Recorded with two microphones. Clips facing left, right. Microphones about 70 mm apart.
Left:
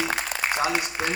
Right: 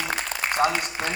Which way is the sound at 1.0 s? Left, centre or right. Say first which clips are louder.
Left 2 dB; centre.